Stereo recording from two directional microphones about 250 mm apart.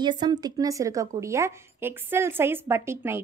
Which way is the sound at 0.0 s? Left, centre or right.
Centre.